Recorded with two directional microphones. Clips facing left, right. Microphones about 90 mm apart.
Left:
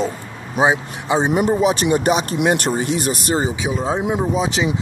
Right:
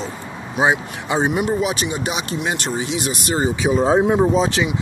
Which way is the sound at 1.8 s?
45° left (ahead or behind).